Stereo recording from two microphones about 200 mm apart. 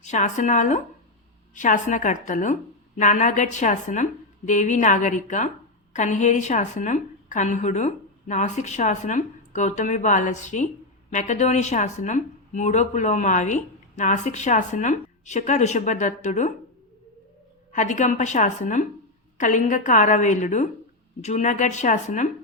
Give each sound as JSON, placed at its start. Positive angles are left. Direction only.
{"t": 0.0, "sound": "speech", "side_deg": 35}
{"t": 17.7, "sound": "speech", "side_deg": 40}